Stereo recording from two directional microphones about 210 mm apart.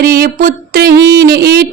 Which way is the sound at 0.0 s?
45° right (ahead or behind).